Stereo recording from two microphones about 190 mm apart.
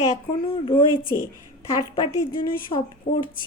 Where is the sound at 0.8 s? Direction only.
25° left (ahead or behind).